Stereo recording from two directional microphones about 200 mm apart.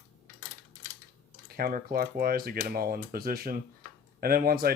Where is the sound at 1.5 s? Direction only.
45° right (ahead or behind).